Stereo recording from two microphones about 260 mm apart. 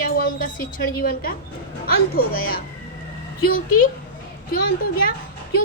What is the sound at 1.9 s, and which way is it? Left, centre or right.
Speech, left.